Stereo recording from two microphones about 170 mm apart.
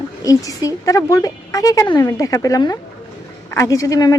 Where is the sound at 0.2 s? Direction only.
20° left (ahead or behind).